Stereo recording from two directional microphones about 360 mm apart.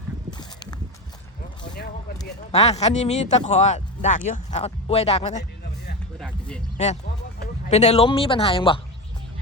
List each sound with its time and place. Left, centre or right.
0.3 s a sound: centre
2.2 s speech: left
5.4 s music: left
6.1 s speech: centre
6.7 s speech: centre